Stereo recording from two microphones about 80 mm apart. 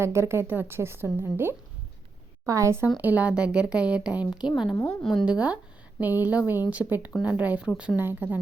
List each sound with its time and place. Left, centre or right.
0.0 s a woman's voice: right
3.0 s speech: centre
4.9 s a woman's voice: centre
5.2 s a woman's voice: centre